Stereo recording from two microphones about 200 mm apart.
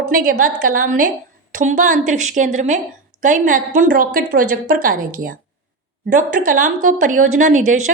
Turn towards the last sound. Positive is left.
turn(degrees=-40)  # may be behind; listen again after turning